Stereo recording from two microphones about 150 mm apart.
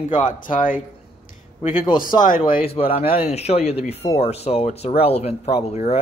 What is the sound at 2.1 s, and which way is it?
Speech, 30° left (ahead or behind).